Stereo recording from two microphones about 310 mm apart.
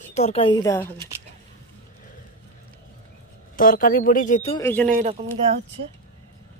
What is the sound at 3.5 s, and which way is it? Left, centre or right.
Speech, left.